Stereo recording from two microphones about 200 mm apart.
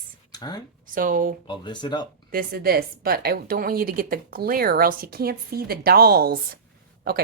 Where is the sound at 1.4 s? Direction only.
25° left (ahead or behind).